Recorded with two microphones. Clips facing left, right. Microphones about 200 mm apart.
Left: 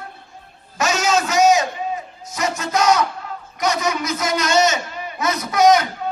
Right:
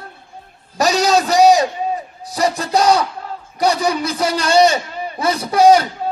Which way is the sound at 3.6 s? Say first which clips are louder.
Right 4 dB; 35° right (ahead or behind).